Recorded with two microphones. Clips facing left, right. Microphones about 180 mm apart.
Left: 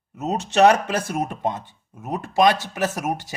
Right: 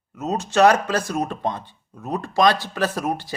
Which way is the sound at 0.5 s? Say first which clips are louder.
Even; 20° left (ahead or behind).